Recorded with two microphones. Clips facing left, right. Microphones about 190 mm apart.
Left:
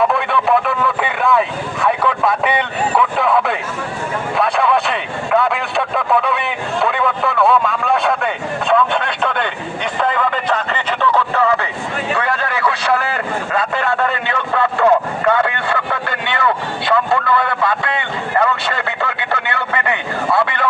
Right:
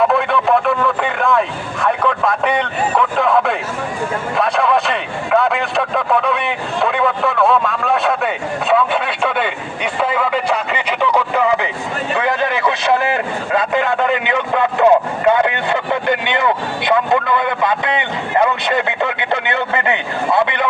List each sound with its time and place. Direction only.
0.1 s speech: centre (ahead or behind)
4.4 s a sound: centre (ahead or behind); by 11.7 s 15° right (ahead or behind)
12.1 s vehicle: 20° right (ahead or behind)